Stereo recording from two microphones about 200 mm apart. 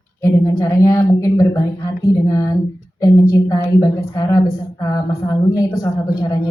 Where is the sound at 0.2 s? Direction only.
15° left (ahead or behind).